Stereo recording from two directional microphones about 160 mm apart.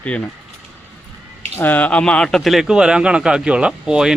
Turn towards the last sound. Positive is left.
turn(degrees=-5)  # may be behind; listen again after turning